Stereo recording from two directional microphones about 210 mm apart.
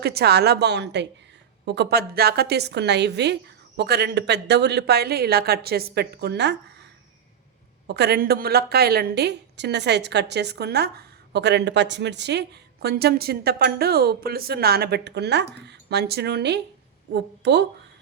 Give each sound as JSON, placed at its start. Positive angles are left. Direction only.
{"t": 0.0, "sound": "a woman's voice", "side_deg": -50}
{"t": 7.9, "sound": "a woman's voice", "side_deg": -50}